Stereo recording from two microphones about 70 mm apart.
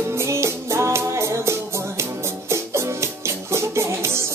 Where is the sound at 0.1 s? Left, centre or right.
Right.